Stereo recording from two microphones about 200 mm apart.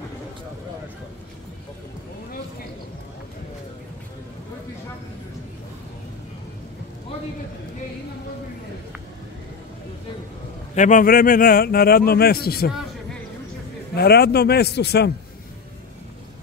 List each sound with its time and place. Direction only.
10.7 s a man's voice: 40° left (ahead or behind)
13.9 s a man's voice: 50° left (ahead or behind)